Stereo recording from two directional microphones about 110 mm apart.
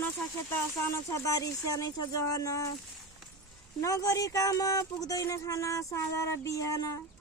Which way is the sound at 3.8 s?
30° left (ahead or behind).